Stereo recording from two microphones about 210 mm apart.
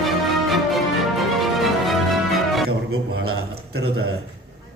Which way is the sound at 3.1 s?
50° right (ahead or behind).